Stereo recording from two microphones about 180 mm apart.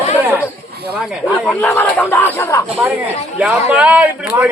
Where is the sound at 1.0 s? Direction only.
Centre (ahead or behind).